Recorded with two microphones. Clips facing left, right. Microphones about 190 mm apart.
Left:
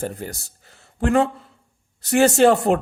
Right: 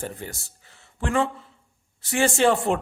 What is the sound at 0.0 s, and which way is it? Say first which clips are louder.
Speech: left 5 dB; 35° left (ahead or behind).